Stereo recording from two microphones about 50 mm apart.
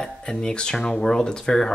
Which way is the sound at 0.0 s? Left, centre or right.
Centre.